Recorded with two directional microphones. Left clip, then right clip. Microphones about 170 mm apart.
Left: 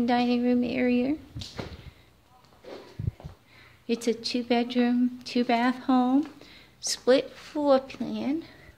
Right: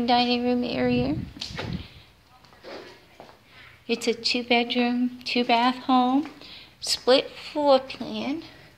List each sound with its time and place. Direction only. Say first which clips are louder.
0.0 s speech: right 3 dB; 45° left (ahead or behind)
3.8 s speech: right 3 dB; 45° left (ahead or behind)